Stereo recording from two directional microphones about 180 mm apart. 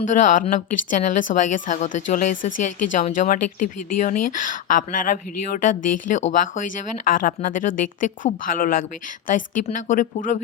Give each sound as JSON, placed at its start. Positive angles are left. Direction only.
{"t": 0.0, "sound": "speech", "side_deg": 45}